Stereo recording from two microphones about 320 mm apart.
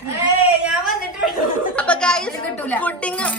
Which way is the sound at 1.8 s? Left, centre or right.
Centre.